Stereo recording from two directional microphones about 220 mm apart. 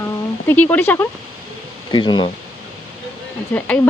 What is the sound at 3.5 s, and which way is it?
Speech, 5° left (ahead or behind).